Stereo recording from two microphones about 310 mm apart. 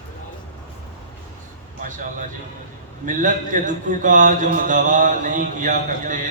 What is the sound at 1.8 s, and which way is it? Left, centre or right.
A man's voice, right.